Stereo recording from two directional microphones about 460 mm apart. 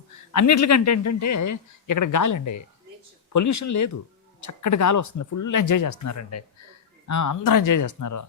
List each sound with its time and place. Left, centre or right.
0.3 s speech: left